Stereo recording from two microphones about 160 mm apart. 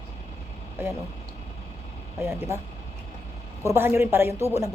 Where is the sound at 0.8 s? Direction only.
15° right (ahead or behind).